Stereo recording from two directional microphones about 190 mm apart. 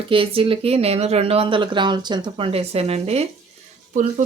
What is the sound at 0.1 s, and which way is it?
Speech, 30° right (ahead or behind).